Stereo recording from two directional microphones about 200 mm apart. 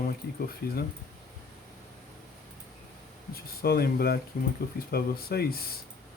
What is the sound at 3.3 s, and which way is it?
Speech, 50° left (ahead or behind).